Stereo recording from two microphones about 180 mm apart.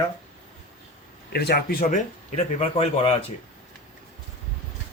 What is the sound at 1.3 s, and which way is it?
Speech, 60° left (ahead or behind).